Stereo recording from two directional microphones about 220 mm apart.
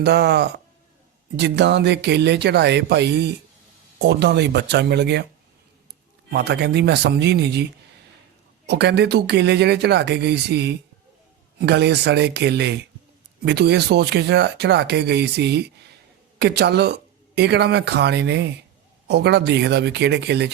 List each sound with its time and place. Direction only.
0.0 s speech: 50° right (ahead or behind)
6.3 s speech: 50° right (ahead or behind)